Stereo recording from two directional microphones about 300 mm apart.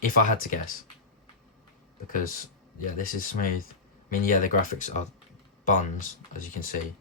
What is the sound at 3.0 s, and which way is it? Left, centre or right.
Speech, left.